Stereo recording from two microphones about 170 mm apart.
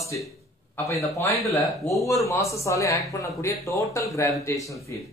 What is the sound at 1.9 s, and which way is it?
Speech, 20° left (ahead or behind).